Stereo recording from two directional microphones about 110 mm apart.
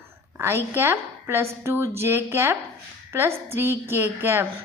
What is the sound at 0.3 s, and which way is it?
A woman's voice, 25° right (ahead or behind).